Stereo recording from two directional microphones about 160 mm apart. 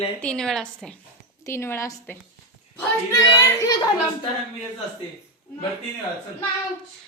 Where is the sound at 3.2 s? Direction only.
20° left (ahead or behind).